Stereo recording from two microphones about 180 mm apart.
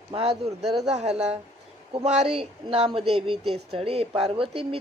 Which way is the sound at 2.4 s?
30° right (ahead or behind).